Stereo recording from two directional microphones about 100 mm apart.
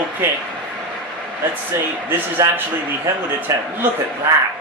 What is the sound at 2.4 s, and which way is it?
Speech, 30° right (ahead or behind).